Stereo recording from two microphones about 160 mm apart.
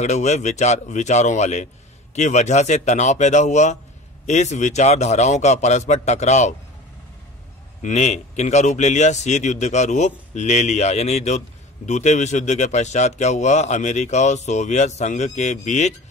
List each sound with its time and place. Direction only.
0.0 s speech: 45° left (ahead or behind)
7.8 s speech: 45° left (ahead or behind)